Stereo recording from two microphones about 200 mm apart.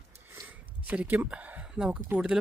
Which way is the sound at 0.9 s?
10° right (ahead or behind).